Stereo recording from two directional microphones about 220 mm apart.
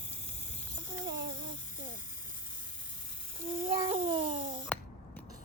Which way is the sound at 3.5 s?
25° right (ahead or behind).